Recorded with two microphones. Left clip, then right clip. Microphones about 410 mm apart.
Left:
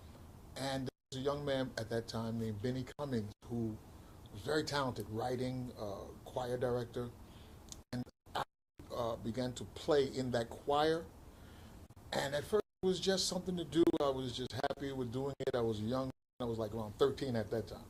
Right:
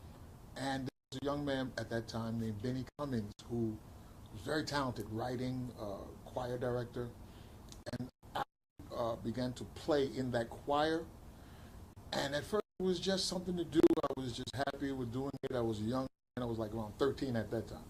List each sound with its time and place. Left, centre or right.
0.5 s speech: centre
4.4 s speech: centre
7.7 s a sound: centre
8.9 s speech: left
12.1 s speech: centre